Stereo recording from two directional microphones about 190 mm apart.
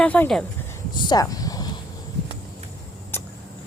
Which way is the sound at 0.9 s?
20° left (ahead or behind).